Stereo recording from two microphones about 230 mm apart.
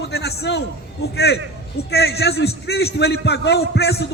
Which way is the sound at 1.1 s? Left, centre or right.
Left.